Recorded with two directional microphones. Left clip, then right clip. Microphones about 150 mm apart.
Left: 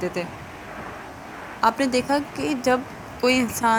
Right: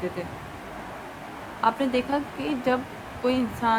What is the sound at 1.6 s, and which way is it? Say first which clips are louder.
Speech: left 3 dB; 65° left (ahead or behind).